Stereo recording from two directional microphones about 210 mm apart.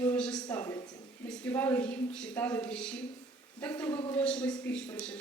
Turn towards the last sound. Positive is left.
turn(degrees=5)  # may be behind; listen again after turning